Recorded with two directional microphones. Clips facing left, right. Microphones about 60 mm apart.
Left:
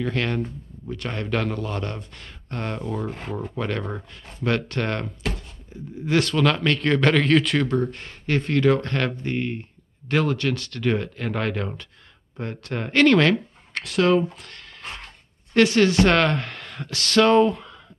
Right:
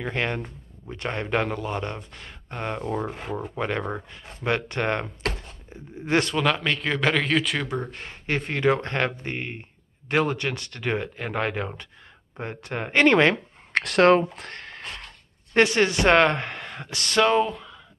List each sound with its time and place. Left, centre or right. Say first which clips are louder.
0.0 s a man's voice: left 3 dB; right
3.2 s speech: even; centre
3.5 s a man's voice: right 1 dB; centre
5.7 s speech: left 1 dB; right
6.3 s a man's voice: left 3 dB; centre
13.7 s speech: right 2 dB; right
15.5 s a man's voice: left 3 dB; right
17.3 s speech: left 5 dB; centre